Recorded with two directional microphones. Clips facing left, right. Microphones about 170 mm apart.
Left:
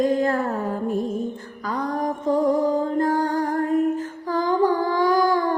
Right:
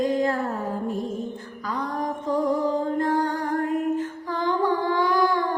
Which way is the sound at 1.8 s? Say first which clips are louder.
Left 4 dB; 45° left (ahead or behind).